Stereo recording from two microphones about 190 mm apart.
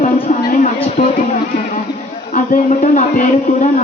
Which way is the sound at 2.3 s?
40° left (ahead or behind).